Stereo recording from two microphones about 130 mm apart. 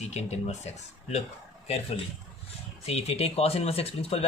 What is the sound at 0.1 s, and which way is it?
Speech, 55° left (ahead or behind).